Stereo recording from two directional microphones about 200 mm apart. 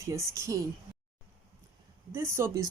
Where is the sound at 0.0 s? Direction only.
15° right (ahead or behind).